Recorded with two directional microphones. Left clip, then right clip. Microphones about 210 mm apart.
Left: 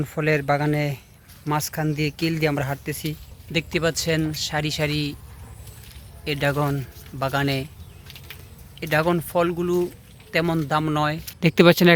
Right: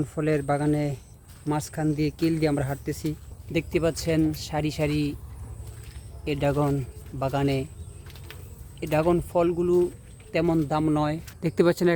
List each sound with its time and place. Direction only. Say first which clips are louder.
0.0 s speech: left 3 dB; 10° left (ahead or behind)
6.2 s speech: left 2 dB; centre (ahead or behind)
8.8 s speech: left 2 dB; centre (ahead or behind)
11.3 s speech: left 7 dB; 20° left (ahead or behind)